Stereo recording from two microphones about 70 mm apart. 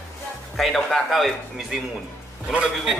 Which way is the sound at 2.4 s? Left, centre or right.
Centre.